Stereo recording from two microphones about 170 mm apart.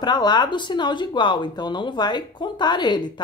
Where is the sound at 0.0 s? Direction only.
25° left (ahead or behind).